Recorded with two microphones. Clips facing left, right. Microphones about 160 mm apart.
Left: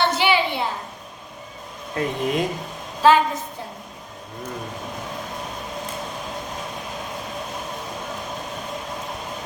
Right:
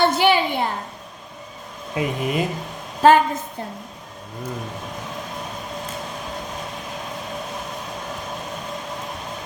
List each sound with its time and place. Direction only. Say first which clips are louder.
0.0 s a sound: right 3 dB; 50° right (ahead or behind)
2.0 s speech: even; 5° right (ahead or behind)
3.0 s a woman's voice: right 2 dB; 50° right (ahead or behind)